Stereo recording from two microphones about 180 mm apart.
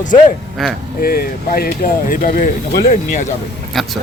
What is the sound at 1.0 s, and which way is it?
Speech, 55° left (ahead or behind).